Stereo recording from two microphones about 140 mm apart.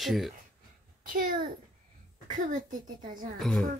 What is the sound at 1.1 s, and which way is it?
Speech, 90° right.